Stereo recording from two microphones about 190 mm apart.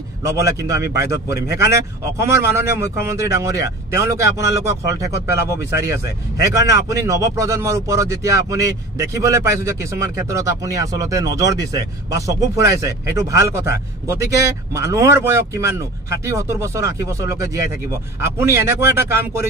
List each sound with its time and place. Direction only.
0.2 s a man's voice: 15° right (ahead or behind)